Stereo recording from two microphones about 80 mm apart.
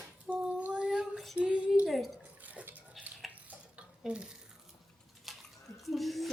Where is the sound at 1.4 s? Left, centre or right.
Centre.